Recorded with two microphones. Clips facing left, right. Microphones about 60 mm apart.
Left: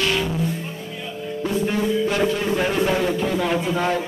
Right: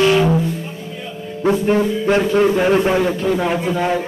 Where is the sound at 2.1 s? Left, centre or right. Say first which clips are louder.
Right 7 dB; right.